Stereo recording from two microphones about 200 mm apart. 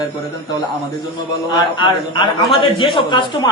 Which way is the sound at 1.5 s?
25° left (ahead or behind).